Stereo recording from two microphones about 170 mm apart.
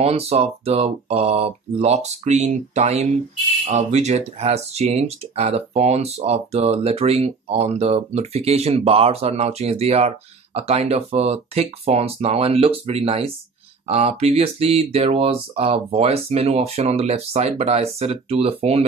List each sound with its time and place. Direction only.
0.0 s speech: 35° right (ahead or behind)